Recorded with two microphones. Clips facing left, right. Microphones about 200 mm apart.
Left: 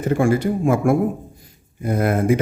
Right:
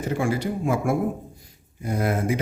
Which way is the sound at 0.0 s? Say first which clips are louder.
Left 7 dB; 55° left (ahead or behind).